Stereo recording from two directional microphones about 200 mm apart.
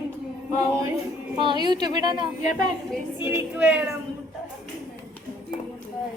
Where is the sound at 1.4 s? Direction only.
25° right (ahead or behind).